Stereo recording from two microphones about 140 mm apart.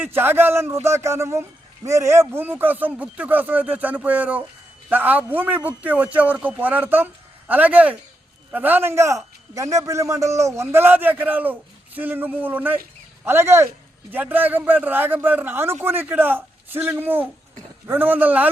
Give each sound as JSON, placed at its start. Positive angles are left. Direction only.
{"t": 0.0, "sound": "a man's voice", "side_deg": -15}